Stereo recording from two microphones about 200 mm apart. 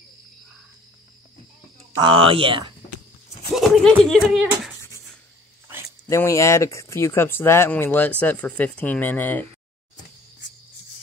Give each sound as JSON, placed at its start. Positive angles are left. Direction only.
{"t": 2.0, "sound": "speech", "side_deg": -25}
{"t": 3.5, "sound": "speech", "side_deg": 0}
{"t": 6.0, "sound": "speech", "side_deg": 15}